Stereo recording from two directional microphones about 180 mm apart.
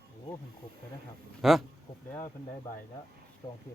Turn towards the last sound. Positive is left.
turn(degrees=25)  # may be behind; listen again after turning